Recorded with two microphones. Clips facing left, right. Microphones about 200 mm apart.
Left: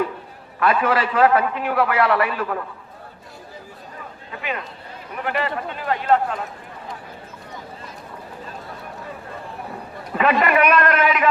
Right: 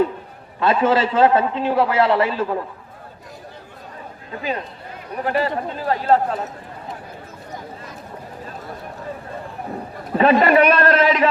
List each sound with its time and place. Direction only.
0.6 s a man's voice: 25° right (ahead or behind)
4.3 s a man's voice: 35° right (ahead or behind)
10.2 s a man's voice: 30° right (ahead or behind)